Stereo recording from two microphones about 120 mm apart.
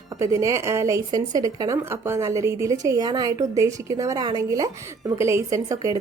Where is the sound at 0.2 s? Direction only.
25° right (ahead or behind).